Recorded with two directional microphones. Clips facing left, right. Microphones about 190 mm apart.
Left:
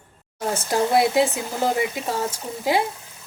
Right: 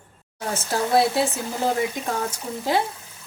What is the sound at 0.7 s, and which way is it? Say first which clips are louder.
Speech: left 1 dB; 15° left (ahead or behind).